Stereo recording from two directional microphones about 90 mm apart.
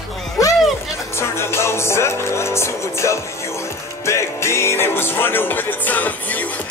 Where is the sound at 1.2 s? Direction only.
30° left (ahead or behind).